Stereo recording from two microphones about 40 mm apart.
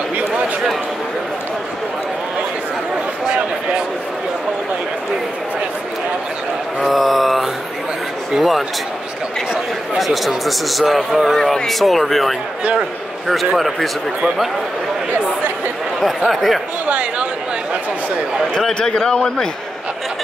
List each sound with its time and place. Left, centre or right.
6.8 s a sound: centre
8.4 s speech: centre
9.9 s speech: centre
11.3 s speech: centre
16.3 s speech: centre
16.8 s a sound: right
18.7 s a man's voice: centre